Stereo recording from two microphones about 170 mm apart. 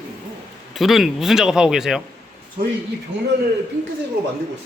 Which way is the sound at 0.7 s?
Centre (ahead or behind).